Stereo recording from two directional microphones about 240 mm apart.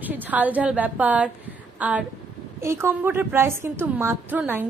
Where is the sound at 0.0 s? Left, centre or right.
Centre.